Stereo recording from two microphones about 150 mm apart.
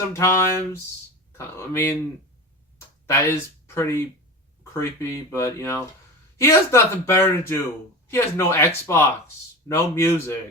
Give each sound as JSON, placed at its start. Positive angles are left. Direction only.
{"t": 0.1, "sound": "speech", "side_deg": 20}
{"t": 3.1, "sound": "speech", "side_deg": 20}